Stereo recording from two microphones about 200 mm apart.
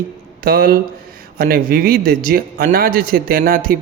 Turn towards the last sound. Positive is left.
turn(degrees=-45)  # may be behind; listen again after turning